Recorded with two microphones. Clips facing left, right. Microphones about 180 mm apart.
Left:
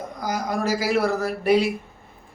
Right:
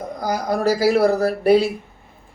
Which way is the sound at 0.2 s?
35° right (ahead or behind).